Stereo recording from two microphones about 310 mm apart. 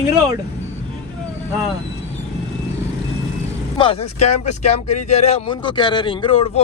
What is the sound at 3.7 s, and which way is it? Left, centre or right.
Speech, centre.